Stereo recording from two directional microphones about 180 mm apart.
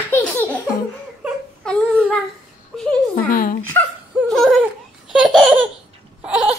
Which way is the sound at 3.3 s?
50° left (ahead or behind).